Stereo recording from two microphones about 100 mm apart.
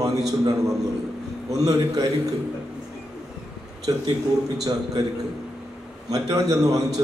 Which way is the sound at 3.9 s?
50° right (ahead or behind).